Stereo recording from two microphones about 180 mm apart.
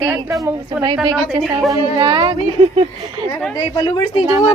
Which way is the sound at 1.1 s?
Centre (ahead or behind).